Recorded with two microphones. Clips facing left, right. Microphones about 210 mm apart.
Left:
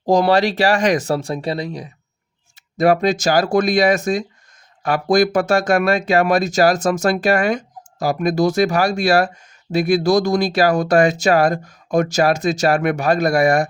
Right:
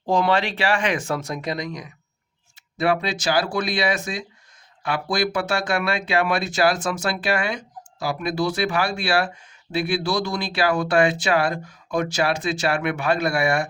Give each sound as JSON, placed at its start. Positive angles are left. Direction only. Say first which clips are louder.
{"t": 0.0, "sound": "speech", "louder": "left 6 dB", "side_deg": 40}
{"t": 2.7, "sound": "speech", "louder": "left 7 dB", "side_deg": 40}